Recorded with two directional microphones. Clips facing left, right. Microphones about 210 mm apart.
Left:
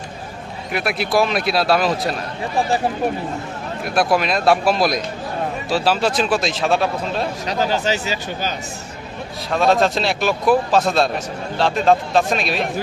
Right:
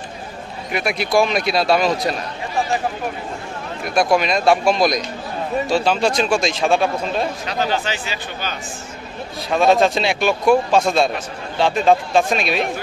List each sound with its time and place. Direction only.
0.7 s speech: centre (ahead or behind)
3.8 s speech: 5° left (ahead or behind)
7.4 s speech: 40° left (ahead or behind)
9.5 s speech: centre (ahead or behind)